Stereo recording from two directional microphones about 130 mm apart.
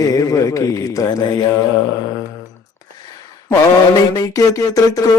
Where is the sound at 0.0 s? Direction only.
25° left (ahead or behind).